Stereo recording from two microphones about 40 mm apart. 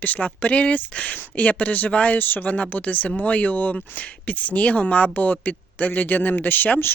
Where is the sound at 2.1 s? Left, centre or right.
Left.